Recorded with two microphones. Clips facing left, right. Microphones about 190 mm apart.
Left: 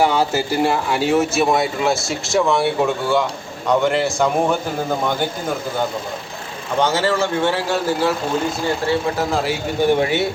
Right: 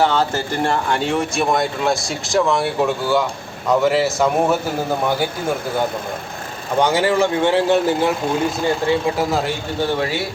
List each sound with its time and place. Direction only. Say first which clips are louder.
0.0 s speech: left 1 dB; 10° left (ahead or behind)
6.7 s speech: right 2 dB; 15° right (ahead or behind)
9.8 s speech: left 5 dB; 20° left (ahead or behind)